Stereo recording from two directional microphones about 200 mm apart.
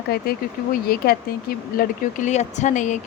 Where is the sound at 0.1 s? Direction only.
50° left (ahead or behind).